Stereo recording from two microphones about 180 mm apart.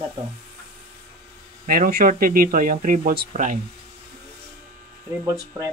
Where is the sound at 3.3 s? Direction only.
45° right (ahead or behind).